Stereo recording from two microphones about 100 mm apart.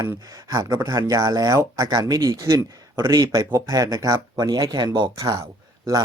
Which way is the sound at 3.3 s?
35° right (ahead or behind).